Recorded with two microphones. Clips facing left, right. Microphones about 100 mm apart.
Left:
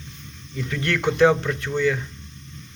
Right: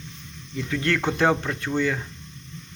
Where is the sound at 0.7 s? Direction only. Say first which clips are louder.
Left 1 dB; 25° right (ahead or behind).